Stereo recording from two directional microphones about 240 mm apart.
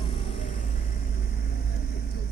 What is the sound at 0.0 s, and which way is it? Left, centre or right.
Vehicle, left.